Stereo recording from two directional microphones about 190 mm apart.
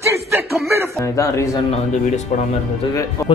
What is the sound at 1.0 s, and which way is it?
Speech, 15° left (ahead or behind).